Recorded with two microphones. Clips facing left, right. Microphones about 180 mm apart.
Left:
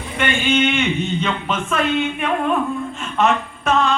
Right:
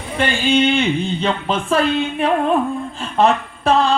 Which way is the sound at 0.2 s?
35° right (ahead or behind).